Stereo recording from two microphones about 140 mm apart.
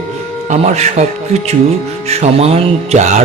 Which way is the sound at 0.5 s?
50° right (ahead or behind).